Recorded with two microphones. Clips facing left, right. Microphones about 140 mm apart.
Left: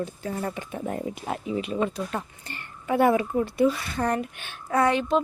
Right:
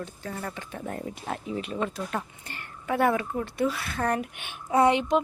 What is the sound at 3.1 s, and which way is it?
Speech, 15° left (ahead or behind).